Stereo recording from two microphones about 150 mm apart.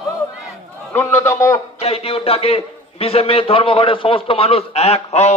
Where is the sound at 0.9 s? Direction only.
15° left (ahead or behind).